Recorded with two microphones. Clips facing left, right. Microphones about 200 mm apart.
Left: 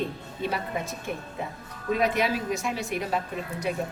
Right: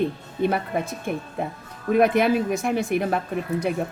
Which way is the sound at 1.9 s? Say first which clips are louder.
Right 7 dB; 55° right (ahead or behind).